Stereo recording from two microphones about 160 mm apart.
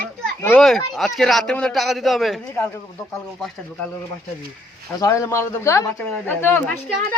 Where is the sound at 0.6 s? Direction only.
Centre (ahead or behind).